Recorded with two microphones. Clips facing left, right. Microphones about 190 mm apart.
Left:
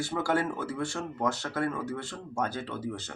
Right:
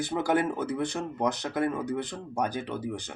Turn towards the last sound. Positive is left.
turn(degrees=-15)  # may be behind; listen again after turning